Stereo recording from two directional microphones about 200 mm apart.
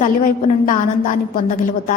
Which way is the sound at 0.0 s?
40° left (ahead or behind).